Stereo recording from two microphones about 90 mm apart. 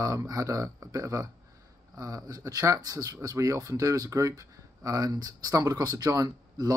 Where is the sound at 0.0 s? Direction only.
40° right (ahead or behind).